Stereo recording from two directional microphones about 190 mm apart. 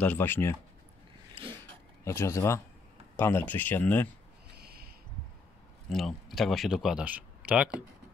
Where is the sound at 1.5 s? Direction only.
15° left (ahead or behind).